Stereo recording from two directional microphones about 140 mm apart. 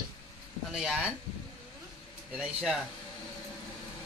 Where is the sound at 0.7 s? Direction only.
5° right (ahead or behind).